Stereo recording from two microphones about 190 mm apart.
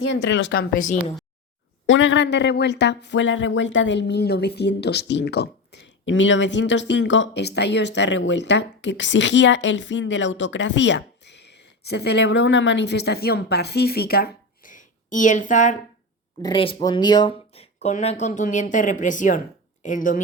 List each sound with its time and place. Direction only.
0.0 s speech: 75° left (ahead or behind)
0.8 s speech: 40° left (ahead or behind)
1.9 s speech: 75° left (ahead or behind); by 15.8 s 40° left (ahead or behind)
16.4 s speech: 25° left (ahead or behind); by 20.2 s 45° left (ahead or behind)